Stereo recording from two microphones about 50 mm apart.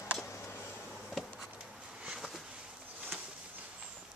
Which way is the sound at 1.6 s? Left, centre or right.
Right.